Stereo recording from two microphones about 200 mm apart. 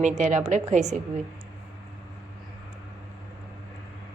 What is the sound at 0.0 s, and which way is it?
A woman's voice, 35° right (ahead or behind).